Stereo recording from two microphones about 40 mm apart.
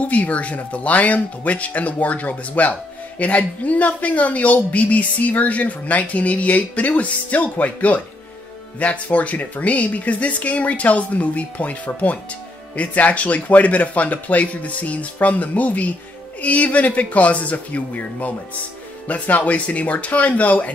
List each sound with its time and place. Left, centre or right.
0.0 s a woman's voice: left